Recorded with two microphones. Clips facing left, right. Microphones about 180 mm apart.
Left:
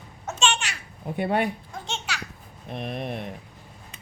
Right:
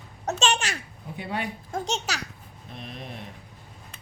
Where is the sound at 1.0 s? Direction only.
55° left (ahead or behind).